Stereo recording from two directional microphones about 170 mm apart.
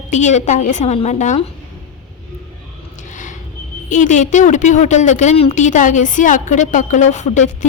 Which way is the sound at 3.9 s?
45° left (ahead or behind).